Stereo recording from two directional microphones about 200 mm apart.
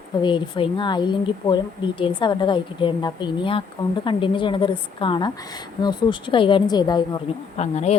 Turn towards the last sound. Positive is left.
turn(degrees=35)  # may be behind; listen again after turning